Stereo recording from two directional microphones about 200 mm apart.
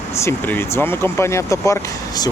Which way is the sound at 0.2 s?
10° left (ahead or behind).